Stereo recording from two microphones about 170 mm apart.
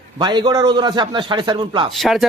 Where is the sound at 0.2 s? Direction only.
25° right (ahead or behind).